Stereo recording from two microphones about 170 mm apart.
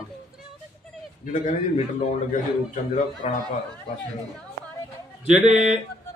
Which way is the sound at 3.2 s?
35° left (ahead or behind).